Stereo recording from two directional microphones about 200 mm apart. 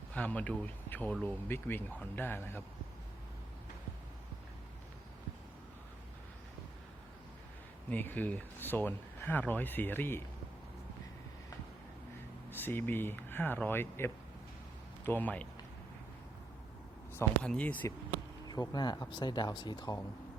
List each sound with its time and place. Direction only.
0.1 s speech: 5° left (ahead or behind)
7.9 s speech: 10° left (ahead or behind)
12.5 s speech: 10° left (ahead or behind)
17.2 s speech: 5° left (ahead or behind)
18.4 s speech: 20° left (ahead or behind)